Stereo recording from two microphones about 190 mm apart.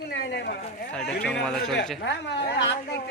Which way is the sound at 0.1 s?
60° left (ahead or behind).